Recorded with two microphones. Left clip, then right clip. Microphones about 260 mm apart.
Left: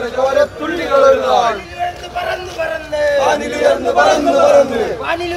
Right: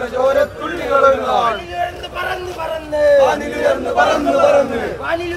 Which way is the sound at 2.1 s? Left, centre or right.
Centre.